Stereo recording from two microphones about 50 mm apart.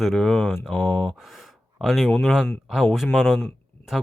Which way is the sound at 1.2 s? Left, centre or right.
Centre.